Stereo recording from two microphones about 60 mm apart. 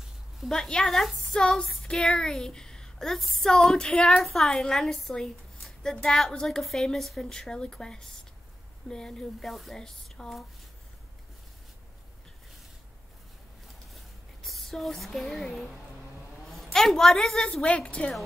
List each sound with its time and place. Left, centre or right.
0.4 s a woman's voice: centre
4.2 s a woman's voice: centre
14.4 s a sound: centre
16.7 s a woman's voice: centre